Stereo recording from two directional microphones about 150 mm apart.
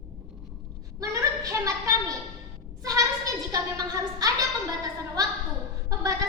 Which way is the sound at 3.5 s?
25° right (ahead or behind).